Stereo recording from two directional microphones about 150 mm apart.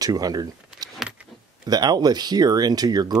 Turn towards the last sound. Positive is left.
turn(degrees=-25)  # may be behind; listen again after turning